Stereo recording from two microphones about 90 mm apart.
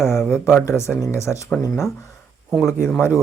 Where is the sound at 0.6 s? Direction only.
30° left (ahead or behind).